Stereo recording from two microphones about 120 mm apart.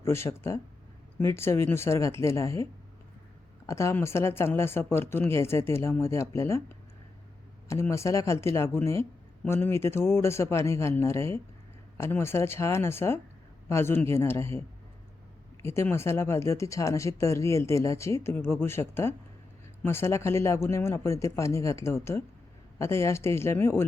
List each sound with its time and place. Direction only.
0.0 s speech: 20° left (ahead or behind)
3.7 s speech: 25° left (ahead or behind)
7.7 s speech: 25° left (ahead or behind)
15.6 s speech: 20° left (ahead or behind)